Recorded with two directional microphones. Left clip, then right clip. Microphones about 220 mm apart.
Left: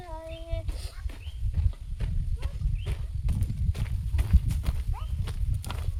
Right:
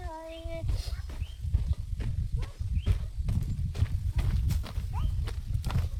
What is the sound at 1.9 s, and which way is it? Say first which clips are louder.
Livestock: even; 20° left (ahead or behind).